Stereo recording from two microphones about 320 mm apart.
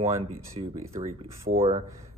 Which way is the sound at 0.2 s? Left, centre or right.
Centre.